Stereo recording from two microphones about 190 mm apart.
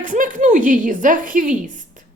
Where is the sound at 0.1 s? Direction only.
45° right (ahead or behind).